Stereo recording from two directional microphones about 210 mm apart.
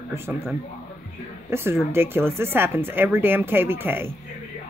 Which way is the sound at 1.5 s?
10° right (ahead or behind).